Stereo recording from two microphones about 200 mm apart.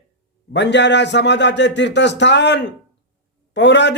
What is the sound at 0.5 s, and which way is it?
A man's voice, 60° left (ahead or behind).